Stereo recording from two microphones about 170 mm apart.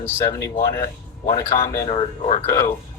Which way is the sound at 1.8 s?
30° left (ahead or behind).